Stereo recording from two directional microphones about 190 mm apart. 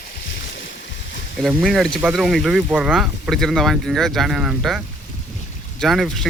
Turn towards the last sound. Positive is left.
turn(degrees=0)  # may be behind; listen again after turning